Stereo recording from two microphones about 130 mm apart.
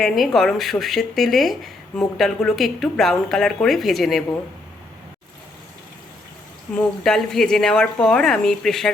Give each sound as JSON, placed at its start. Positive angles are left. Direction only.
{"t": 0.0, "sound": "speech", "side_deg": 0}
{"t": 6.7, "sound": "speech", "side_deg": 5}